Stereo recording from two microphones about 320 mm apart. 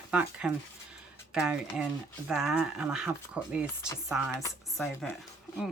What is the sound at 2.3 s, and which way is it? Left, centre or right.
Speech, centre.